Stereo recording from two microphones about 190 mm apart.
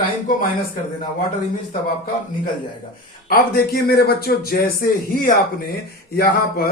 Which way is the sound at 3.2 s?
55° left (ahead or behind).